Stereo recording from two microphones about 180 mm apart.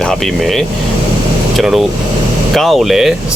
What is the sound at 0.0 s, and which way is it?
Speech, centre (ahead or behind).